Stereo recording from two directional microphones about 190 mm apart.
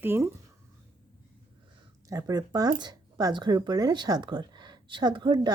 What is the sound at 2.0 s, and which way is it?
Speech, 15° right (ahead or behind).